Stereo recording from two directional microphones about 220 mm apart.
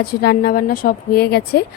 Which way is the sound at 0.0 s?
45° left (ahead or behind).